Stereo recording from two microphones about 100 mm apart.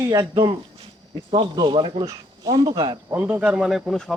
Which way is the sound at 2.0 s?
35° right (ahead or behind).